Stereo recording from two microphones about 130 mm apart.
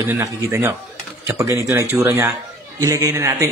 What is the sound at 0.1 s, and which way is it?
Speech, 20° right (ahead or behind).